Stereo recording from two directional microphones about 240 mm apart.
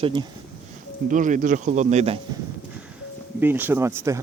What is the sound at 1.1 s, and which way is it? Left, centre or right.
Speech, right.